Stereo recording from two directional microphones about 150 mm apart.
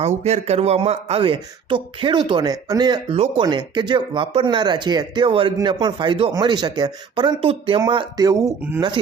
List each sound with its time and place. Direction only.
0.3 s speech: 45° right (ahead or behind); by 8.5 s 25° right (ahead or behind)